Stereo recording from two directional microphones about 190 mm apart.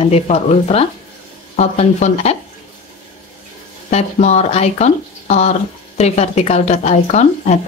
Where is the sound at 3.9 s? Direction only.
35° left (ahead or behind).